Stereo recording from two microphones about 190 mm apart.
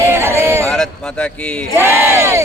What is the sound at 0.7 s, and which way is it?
Speech, 5° left (ahead or behind).